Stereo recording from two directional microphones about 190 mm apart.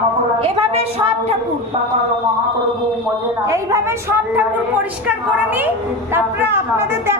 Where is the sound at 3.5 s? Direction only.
15° right (ahead or behind).